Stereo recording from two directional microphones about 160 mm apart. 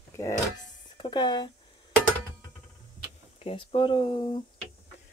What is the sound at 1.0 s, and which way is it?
Speech, 25° left (ahead or behind).